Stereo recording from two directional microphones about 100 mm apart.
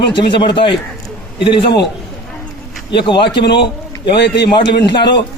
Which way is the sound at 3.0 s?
55° left (ahead or behind).